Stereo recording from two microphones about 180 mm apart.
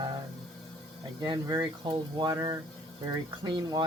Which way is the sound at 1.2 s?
20° right (ahead or behind).